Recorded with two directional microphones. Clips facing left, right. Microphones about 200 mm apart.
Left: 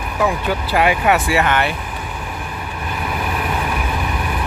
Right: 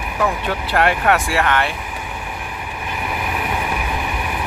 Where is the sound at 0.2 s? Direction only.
5° left (ahead or behind).